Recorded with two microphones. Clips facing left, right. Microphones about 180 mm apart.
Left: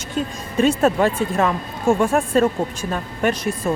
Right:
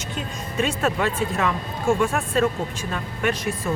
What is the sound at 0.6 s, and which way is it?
Speech, 45° left (ahead or behind).